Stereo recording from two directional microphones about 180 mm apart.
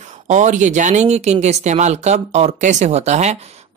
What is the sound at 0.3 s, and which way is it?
Speech, 40° right (ahead or behind).